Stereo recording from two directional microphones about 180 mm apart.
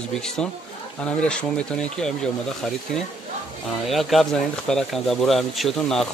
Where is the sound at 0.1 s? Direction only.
5° left (ahead or behind).